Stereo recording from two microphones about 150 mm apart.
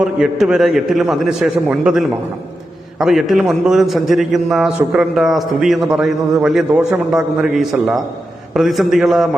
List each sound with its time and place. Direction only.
0.0 s a man's voice: 5° right (ahead or behind)